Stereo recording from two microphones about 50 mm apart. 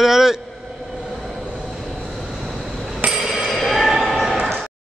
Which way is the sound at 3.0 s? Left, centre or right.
Centre.